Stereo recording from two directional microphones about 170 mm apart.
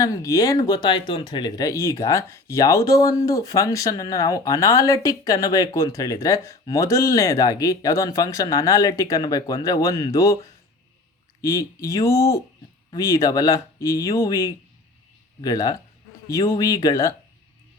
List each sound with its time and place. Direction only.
0.0 s speech: 20° left (ahead or behind)
11.3 s speech: 15° left (ahead or behind)